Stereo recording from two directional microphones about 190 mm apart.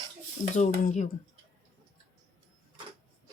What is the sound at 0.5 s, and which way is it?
Speech, 40° left (ahead or behind).